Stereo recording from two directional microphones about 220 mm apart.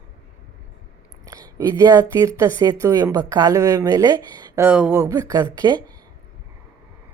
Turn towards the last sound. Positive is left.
turn(degrees=-20)  # may be behind; listen again after turning